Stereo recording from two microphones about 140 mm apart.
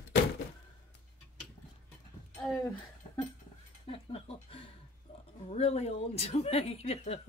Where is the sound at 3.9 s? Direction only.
45° left (ahead or behind).